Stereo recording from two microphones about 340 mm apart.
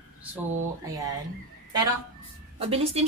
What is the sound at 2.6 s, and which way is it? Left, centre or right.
Speech, centre.